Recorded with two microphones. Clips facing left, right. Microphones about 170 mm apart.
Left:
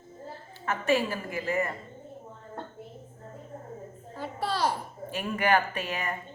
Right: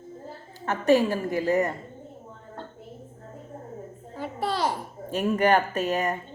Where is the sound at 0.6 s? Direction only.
40° right (ahead or behind).